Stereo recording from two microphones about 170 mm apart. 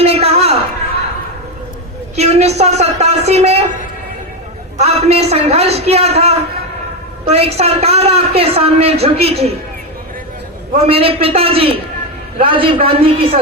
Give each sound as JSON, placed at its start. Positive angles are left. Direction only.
{"t": 0.0, "sound": "a sound", "side_deg": -35}
{"t": 2.1, "sound": "a man's voice", "side_deg": -40}
{"t": 4.8, "sound": "a man's voice", "side_deg": -40}
{"t": 10.8, "sound": "a man's voice", "side_deg": -35}